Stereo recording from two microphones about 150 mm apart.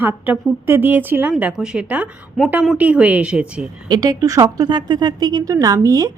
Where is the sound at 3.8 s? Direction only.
25° right (ahead or behind).